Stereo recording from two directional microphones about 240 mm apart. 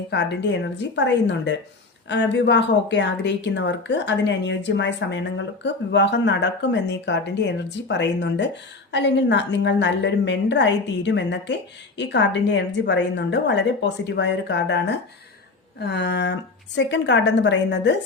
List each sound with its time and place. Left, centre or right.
0.1 s speech: left